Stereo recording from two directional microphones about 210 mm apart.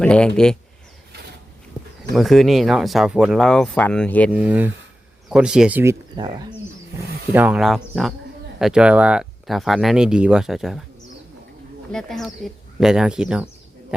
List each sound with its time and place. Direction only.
0.0 s speech: 5° left (ahead or behind)
2.1 s speech: centre (ahead or behind)
4.3 s speech: 5° right (ahead or behind)
7.3 s speech: 5° right (ahead or behind)
11.9 s speech: 5° left (ahead or behind)